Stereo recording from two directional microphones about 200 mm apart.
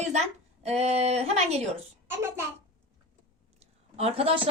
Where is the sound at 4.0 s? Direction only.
30° right (ahead or behind).